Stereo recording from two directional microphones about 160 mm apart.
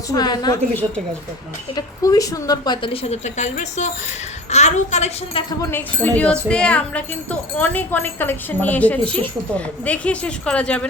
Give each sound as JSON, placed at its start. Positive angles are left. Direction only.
{"t": 0.1, "sound": "a woman's voice", "side_deg": 25}
{"t": 0.7, "sound": "speech", "side_deg": 10}
{"t": 1.7, "sound": "a woman's voice", "side_deg": 20}
{"t": 5.7, "sound": "speech", "side_deg": 10}